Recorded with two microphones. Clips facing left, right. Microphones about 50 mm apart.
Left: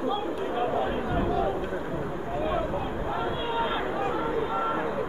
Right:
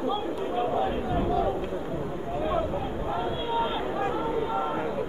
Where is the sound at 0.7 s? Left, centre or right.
Centre.